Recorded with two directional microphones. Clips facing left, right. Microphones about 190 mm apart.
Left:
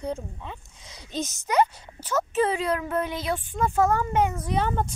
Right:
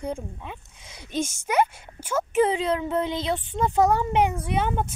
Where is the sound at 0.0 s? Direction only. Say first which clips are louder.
Even; 10° right (ahead or behind).